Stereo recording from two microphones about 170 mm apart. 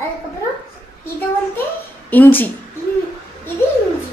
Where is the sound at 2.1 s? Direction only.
10° left (ahead or behind).